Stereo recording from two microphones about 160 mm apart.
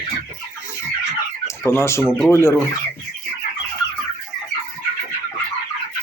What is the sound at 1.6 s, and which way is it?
Speech, 15° left (ahead or behind).